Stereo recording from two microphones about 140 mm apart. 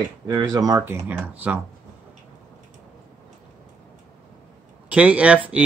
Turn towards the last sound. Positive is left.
turn(degrees=-10)  # may be behind; listen again after turning